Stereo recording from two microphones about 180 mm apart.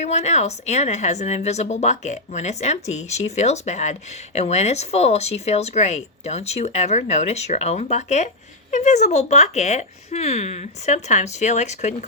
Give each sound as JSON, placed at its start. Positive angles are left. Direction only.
{"t": 0.0, "sound": "speech", "side_deg": 40}